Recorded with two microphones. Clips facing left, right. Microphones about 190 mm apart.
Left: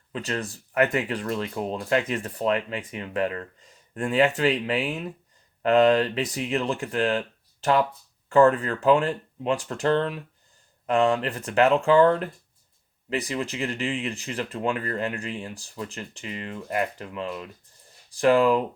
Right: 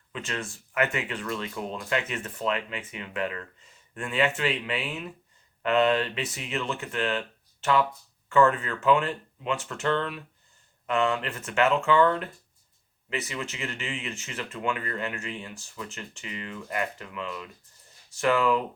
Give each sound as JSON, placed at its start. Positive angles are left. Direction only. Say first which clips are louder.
{"t": 0.1, "sound": "speech", "louder": "left 4 dB", "side_deg": 35}